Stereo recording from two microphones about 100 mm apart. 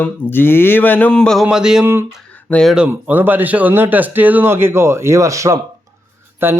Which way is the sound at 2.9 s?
20° right (ahead or behind).